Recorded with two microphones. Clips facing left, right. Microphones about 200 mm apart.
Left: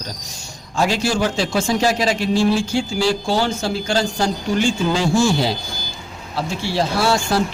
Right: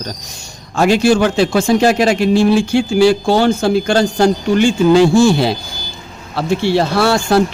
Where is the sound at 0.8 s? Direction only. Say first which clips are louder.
Right 7 dB; 60° right (ahead or behind).